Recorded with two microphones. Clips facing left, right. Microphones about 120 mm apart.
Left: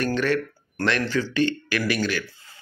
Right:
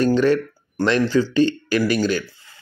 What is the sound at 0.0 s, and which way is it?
A man's voice, 30° right (ahead or behind).